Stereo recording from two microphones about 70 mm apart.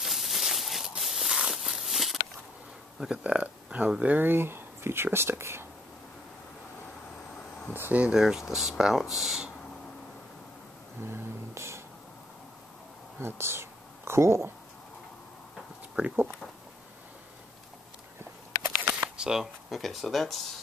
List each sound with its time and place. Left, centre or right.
0.0 s a sound: centre
3.0 s speech: centre; by 5.7 s right
7.7 s speech: right
8.0 s speech: centre
11.1 s music: right
13.2 s speech: right
16.0 s speech: centre
19.1 s speech: centre